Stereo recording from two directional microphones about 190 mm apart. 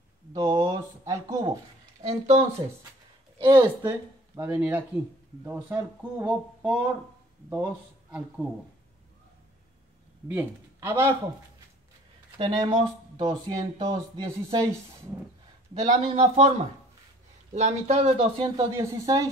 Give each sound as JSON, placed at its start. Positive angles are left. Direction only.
{"t": 0.3, "sound": "a sound", "side_deg": -20}
{"t": 2.0, "sound": "speech", "side_deg": -35}
{"t": 3.3, "sound": "speech", "side_deg": -20}
{"t": 4.4, "sound": "speech", "side_deg": -10}
{"t": 10.2, "sound": "speech", "side_deg": -10}
{"t": 12.4, "sound": "speech", "side_deg": -25}
{"t": 15.8, "sound": "speech", "side_deg": -30}
{"t": 17.6, "sound": "speech", "side_deg": -35}
{"t": 18.6, "sound": "speech", "side_deg": -15}